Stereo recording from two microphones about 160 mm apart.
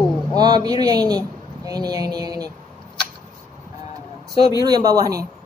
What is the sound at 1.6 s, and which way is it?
Mantra, 25° right (ahead or behind).